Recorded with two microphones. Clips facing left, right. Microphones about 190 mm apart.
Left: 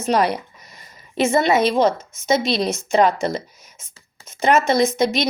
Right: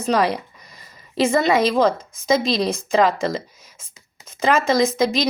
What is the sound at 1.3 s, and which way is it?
Speech, 90° right.